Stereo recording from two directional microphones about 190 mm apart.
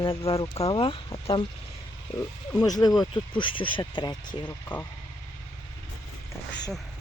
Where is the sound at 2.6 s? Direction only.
20° left (ahead or behind).